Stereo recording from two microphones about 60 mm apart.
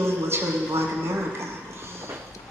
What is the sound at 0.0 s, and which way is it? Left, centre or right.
A man's voice, right.